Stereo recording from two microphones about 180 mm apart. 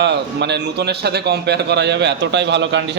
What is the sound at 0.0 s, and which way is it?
A man's voice, 70° right (ahead or behind).